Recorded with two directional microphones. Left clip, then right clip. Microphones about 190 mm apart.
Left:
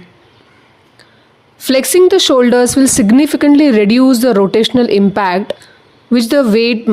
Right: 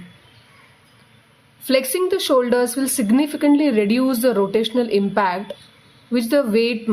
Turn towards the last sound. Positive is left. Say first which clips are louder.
# left 7 dB
turn(degrees=40)  # may be behind; listen again after turning